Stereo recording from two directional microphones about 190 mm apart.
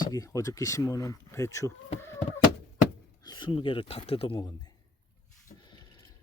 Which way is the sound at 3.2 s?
25° left (ahead or behind).